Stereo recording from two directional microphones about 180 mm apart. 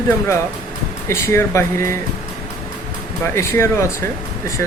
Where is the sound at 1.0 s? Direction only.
15° left (ahead or behind).